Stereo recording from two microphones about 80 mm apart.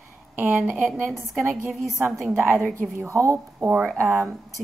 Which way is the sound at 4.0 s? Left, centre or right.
Right.